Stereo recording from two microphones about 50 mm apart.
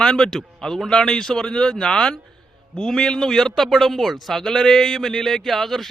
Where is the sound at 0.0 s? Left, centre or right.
Centre.